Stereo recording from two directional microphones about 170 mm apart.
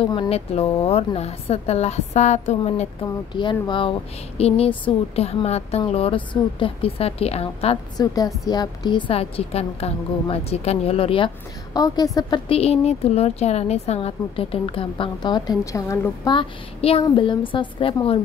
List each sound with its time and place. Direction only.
0.0 s a woman's voice: 35° left (ahead or behind)
8.0 s a woman's voice: 20° left (ahead or behind)
16.3 s a woman's voice: 35° left (ahead or behind)